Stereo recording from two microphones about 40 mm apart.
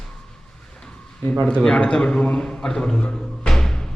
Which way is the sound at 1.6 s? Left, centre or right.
Centre.